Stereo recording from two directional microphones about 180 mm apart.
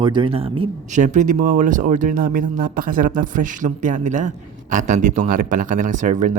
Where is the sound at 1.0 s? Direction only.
45° right (ahead or behind).